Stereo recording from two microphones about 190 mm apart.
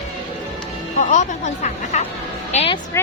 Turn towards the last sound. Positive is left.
turn(degrees=15)  # may be behind; listen again after turning